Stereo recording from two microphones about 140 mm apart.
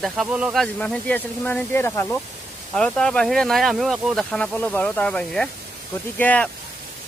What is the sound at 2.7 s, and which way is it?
Speech, 5° left (ahead or behind).